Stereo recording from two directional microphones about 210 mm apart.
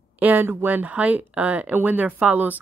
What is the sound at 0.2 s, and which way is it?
A woman's voice, 10° right (ahead or behind).